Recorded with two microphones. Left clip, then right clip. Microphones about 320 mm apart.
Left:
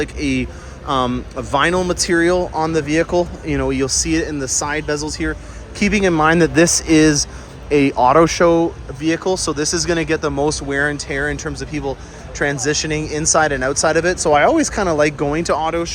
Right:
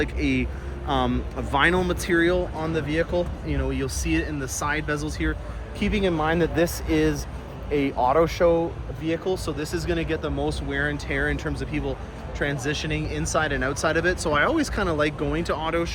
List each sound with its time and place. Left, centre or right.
0.0 s speech: centre
5.8 s speech: left